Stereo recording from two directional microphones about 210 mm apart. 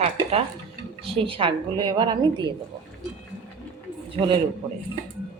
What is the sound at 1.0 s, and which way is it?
Speech, 25° right (ahead or behind).